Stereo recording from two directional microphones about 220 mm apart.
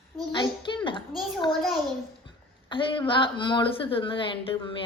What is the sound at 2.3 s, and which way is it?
A woman's voice, 20° left (ahead or behind).